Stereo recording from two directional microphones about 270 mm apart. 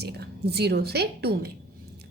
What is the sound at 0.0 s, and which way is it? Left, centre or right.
A woman's voice, right.